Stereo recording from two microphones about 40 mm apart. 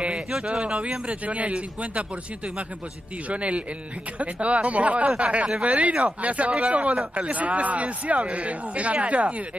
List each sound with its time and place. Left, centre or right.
0.0 s a man's voice: right
3.3 s a man's voice: right